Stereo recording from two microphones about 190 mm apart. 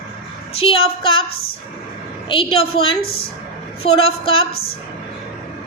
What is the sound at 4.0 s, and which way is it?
Speech, 30° left (ahead or behind).